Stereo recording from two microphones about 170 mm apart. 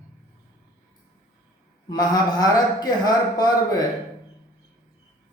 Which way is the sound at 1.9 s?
25° left (ahead or behind).